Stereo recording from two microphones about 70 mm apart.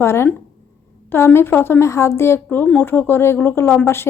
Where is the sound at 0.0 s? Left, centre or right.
Left.